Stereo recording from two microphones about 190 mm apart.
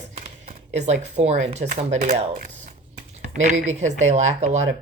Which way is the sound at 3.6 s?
40° right (ahead or behind).